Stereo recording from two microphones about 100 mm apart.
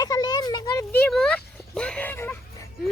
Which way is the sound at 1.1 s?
5° left (ahead or behind).